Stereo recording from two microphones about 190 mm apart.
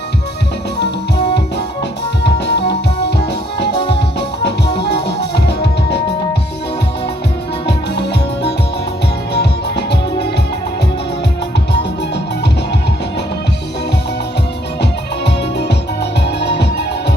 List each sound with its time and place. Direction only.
0.8 s music: 60° left (ahead or behind)
4.8 s music: 60° left (ahead or behind)
9.3 s music: 60° left (ahead or behind)
15.2 s music: 60° left (ahead or behind)